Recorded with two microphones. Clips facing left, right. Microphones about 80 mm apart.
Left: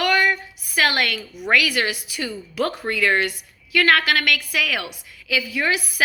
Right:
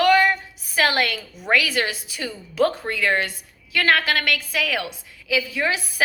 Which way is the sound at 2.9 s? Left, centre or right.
Right.